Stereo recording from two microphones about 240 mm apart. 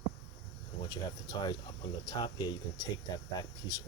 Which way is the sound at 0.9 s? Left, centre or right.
Centre.